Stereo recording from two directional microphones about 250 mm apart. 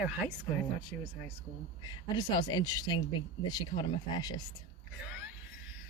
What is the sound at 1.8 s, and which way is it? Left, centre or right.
Speech, centre.